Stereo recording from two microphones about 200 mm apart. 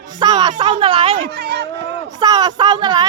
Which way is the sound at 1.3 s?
55° right (ahead or behind).